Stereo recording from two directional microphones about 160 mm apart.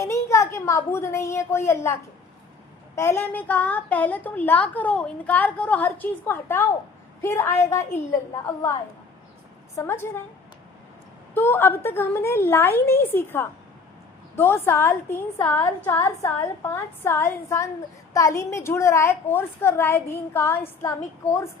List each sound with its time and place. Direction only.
0.0 s a woman's voice: 20° left (ahead or behind)
9.7 s a woman's voice: 15° left (ahead or behind)
11.3 s a woman's voice: 15° left (ahead or behind)